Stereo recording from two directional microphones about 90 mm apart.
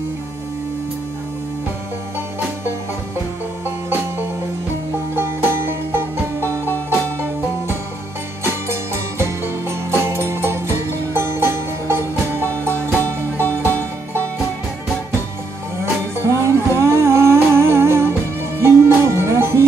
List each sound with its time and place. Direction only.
4.9 s music: 25° right (ahead or behind)
8.6 s music: 30° right (ahead or behind)
15.8 s humming: 30° right (ahead or behind)